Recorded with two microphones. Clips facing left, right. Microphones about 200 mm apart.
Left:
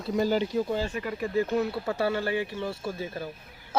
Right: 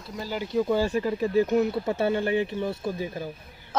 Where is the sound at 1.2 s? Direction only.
15° right (ahead or behind).